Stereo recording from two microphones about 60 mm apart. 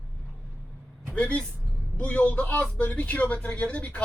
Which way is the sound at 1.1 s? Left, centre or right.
Left.